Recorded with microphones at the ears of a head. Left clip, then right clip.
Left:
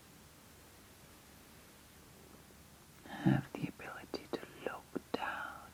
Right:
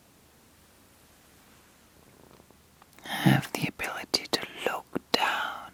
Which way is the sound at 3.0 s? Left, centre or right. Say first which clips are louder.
Right 10 dB; right.